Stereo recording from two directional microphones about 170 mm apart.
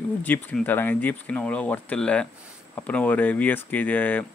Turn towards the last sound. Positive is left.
turn(degrees=10)  # may be behind; listen again after turning